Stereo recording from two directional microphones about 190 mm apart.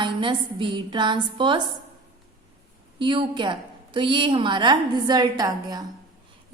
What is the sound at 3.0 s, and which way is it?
A woman's voice, 25° right (ahead or behind).